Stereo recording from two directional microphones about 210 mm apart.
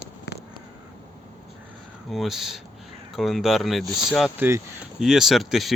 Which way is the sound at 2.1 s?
Centre (ahead or behind).